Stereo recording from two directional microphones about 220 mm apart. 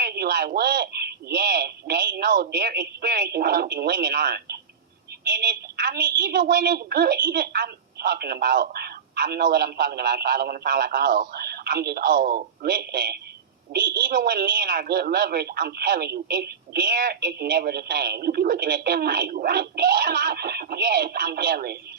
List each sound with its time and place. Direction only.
0.0 s a woman's voice: 45° right (ahead or behind)